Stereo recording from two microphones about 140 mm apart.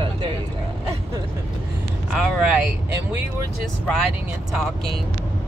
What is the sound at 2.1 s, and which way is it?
Speech, 5° right (ahead or behind).